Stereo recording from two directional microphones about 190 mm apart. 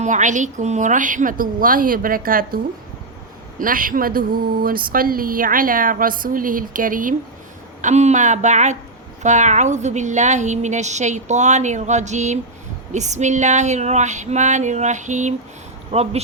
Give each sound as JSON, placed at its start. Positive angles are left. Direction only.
{"t": 0.0, "sound": "speech", "side_deg": -40}
{"t": 3.6, "sound": "a woman's voice", "side_deg": -45}